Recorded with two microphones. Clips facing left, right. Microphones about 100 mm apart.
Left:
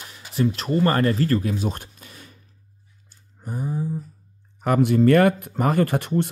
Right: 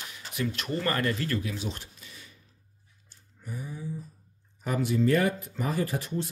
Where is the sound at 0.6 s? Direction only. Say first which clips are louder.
Left 9 dB; 35° left (ahead or behind); by 2.2 s 50° left (ahead or behind).